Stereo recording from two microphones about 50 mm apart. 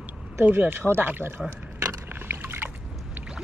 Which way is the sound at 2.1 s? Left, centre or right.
Right.